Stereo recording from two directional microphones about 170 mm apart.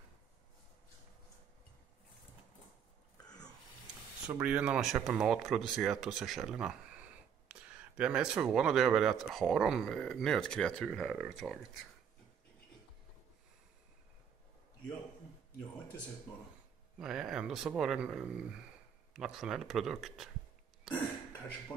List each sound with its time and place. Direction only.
3.3 s a sound: 25° left (ahead or behind)
4.3 s speech: 5° right (ahead or behind)
17.0 s speech: 5° right (ahead or behind)